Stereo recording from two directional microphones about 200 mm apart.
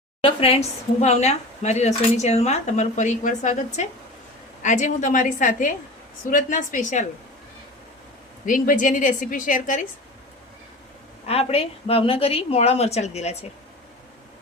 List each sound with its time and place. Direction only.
0.2 s speech: 30° left (ahead or behind)
8.4 s speech: 40° left (ahead or behind)
11.3 s a woman's voice: 30° left (ahead or behind)